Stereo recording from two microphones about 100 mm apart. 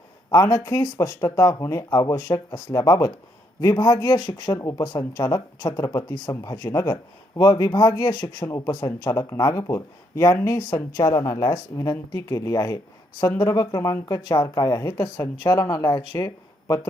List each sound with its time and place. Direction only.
0.3 s speech: 30° left (ahead or behind)
3.8 s speech: 45° left (ahead or behind)
8.4 s speech: 30° left (ahead or behind)
8.7 s speech: 45° left (ahead or behind)
9.1 s speech: 30° left (ahead or behind)